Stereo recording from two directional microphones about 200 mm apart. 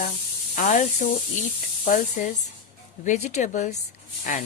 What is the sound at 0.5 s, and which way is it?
Speech, 40° left (ahead or behind).